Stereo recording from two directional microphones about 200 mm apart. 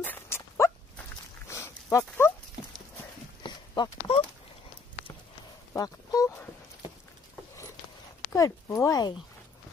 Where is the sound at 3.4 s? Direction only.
20° left (ahead or behind).